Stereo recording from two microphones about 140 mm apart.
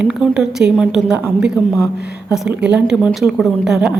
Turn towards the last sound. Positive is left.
turn(degrees=-5)  # may be behind; listen again after turning